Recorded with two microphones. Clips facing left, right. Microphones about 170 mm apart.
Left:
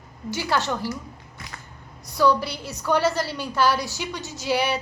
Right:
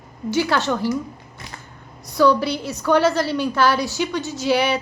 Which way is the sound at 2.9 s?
70° right (ahead or behind).